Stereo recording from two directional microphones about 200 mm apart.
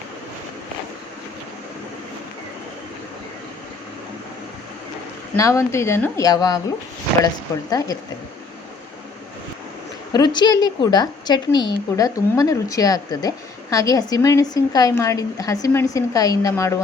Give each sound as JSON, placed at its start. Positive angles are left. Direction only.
{"t": 5.4, "sound": "a woman's voice", "side_deg": 15}
{"t": 7.7, "sound": "a woman's voice", "side_deg": 15}
{"t": 10.1, "sound": "a woman's voice", "side_deg": 20}